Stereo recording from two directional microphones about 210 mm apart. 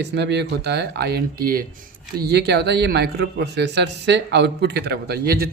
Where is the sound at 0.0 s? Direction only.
55° right (ahead or behind).